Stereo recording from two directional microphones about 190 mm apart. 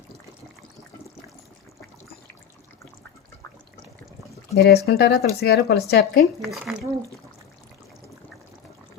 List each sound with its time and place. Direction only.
4.5 s speech: 55° left (ahead or behind)
6.4 s speech: centre (ahead or behind)